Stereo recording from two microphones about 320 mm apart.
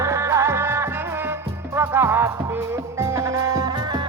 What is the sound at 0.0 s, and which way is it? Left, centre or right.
Music, centre.